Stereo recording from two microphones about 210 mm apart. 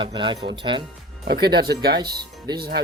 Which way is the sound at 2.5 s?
50° right (ahead or behind).